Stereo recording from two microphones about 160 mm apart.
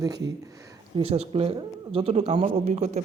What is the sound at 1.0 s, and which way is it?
Speech, 40° right (ahead or behind).